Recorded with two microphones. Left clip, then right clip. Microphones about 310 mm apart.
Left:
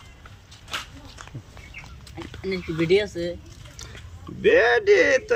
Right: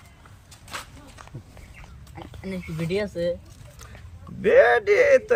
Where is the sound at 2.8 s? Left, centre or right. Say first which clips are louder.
Left 4 dB; centre.